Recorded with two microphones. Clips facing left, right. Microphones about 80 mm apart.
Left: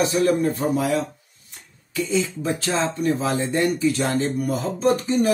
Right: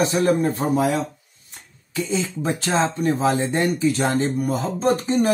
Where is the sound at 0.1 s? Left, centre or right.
Right.